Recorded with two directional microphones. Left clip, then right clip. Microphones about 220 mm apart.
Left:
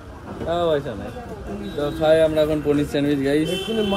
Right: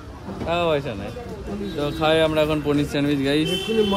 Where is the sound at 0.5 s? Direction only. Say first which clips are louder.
Left 1 dB; 25° right (ahead or behind).